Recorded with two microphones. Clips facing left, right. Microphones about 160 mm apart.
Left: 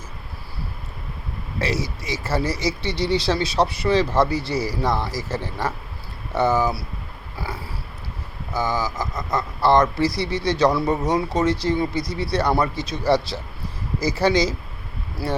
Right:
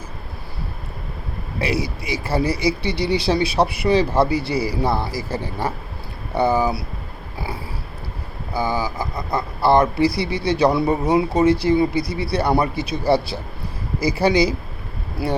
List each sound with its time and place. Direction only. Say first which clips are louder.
1.5 s speech: right 2 dB; 15° right (ahead or behind)
7.3 s a sound: right 2 dB; 15° right (ahead or behind)
8.5 s speech: right 1 dB; 10° right (ahead or behind)